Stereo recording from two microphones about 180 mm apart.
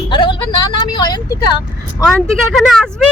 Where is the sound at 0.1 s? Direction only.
25° left (ahead or behind).